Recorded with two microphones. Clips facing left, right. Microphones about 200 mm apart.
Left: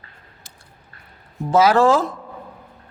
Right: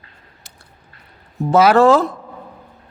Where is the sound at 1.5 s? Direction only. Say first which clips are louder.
Right 3 dB; 65° right (ahead or behind).